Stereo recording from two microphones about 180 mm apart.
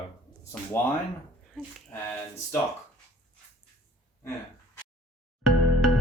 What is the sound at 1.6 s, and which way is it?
Speech, 5° left (ahead or behind).